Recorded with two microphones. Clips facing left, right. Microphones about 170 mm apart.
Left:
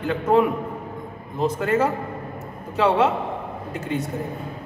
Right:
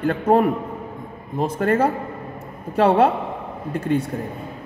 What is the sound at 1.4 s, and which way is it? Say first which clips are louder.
A woman's voice: right 2 dB; 55° right (ahead or behind).